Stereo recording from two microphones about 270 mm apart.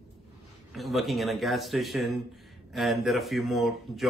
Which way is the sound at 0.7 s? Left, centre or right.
Centre.